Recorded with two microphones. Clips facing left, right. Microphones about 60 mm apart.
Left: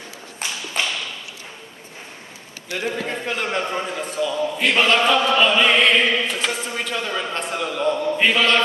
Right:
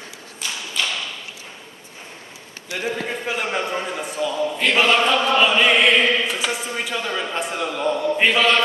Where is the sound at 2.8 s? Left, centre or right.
Centre.